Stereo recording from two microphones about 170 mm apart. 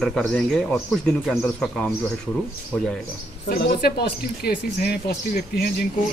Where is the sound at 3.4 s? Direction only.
65° left (ahead or behind).